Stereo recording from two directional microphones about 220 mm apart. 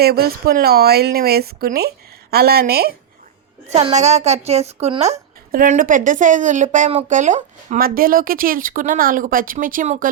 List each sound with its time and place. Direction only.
0.0 s speech: 45° right (ahead or behind)
3.7 s a woman's voice: 25° right (ahead or behind)